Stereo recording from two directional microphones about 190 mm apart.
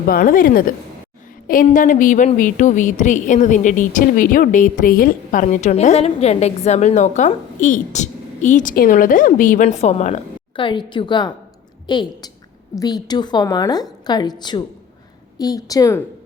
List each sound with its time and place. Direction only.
0.1 s a woman's voice: 45° left (ahead or behind); by 16.0 s 15° left (ahead or behind)